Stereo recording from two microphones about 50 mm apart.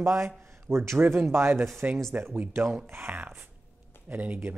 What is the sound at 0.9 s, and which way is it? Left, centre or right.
Speech, right.